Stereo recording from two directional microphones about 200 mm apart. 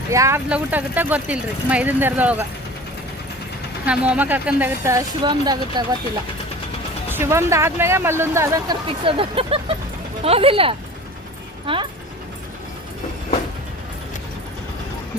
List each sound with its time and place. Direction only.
0.1 s speech: 15° right (ahead or behind)
3.8 s speech: 5° right (ahead or behind); by 5.8 s 20° right (ahead or behind)
7.1 s speech: 15° right (ahead or behind)